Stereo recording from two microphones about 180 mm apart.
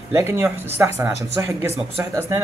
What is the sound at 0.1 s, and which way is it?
Speech, 15° right (ahead or behind).